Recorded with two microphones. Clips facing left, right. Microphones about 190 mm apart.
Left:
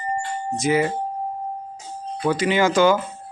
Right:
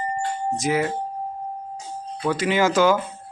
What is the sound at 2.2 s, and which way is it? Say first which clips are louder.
Speech: left 1 dB; centre (ahead or behind).